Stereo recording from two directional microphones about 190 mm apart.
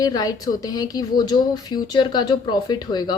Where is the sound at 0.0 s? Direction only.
20° left (ahead or behind).